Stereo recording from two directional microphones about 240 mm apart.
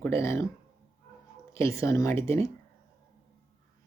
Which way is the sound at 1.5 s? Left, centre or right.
Centre.